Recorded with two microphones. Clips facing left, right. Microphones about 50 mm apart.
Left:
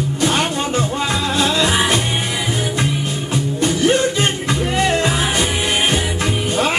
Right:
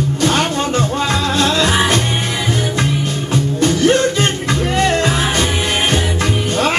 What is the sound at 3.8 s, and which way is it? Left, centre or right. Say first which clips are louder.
Music: right 1 dB; right.